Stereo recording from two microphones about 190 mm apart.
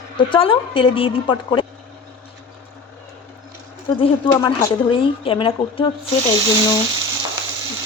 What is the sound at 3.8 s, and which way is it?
A woman's voice, 25° left (ahead or behind).